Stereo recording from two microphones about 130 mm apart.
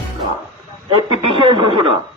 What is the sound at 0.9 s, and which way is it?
Speech, 40° right (ahead or behind).